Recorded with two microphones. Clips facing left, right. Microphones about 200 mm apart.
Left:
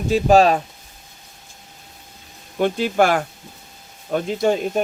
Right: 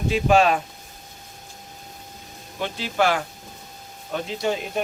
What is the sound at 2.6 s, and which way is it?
Speech, 50° left (ahead or behind).